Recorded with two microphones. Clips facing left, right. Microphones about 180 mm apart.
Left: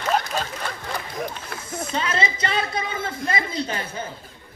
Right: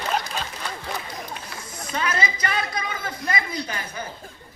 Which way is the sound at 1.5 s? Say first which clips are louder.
Left 3 dB; 55° left (ahead or behind).